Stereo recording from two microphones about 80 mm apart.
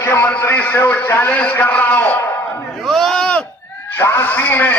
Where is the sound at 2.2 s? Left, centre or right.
Left.